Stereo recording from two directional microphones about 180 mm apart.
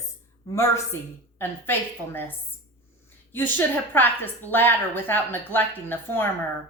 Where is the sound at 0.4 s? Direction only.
15° left (ahead or behind).